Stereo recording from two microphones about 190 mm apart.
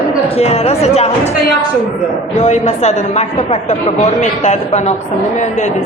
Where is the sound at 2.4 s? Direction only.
35° left (ahead or behind).